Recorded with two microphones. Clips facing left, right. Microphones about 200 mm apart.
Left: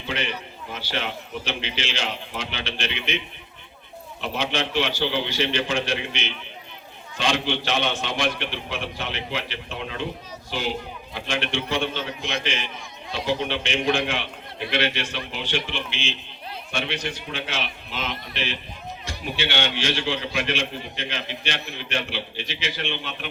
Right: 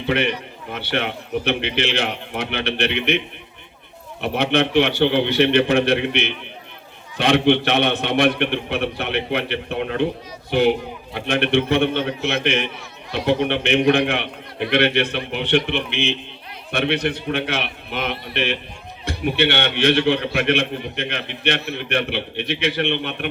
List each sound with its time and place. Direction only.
0.7 s a man's voice: 60° right (ahead or behind)
4.2 s a man's voice: 60° right (ahead or behind)